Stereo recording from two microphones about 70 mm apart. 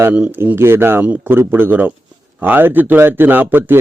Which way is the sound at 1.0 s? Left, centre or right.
Centre.